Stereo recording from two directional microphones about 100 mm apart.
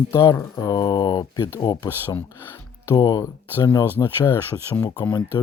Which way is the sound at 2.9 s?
45° left (ahead or behind).